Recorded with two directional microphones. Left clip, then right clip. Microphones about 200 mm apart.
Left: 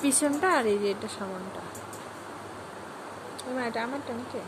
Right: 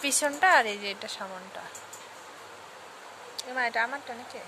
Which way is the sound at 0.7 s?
50° right (ahead or behind).